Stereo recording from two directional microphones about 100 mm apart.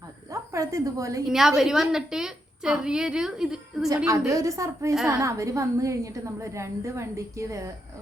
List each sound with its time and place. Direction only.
0.3 s a sound: 30° right (ahead or behind)
1.3 s a woman's voice: 5° right (ahead or behind)
3.8 s a woman's voice: 35° right (ahead or behind)